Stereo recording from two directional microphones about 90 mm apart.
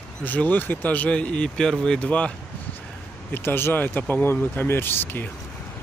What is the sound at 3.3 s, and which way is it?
Speech, 25° left (ahead or behind).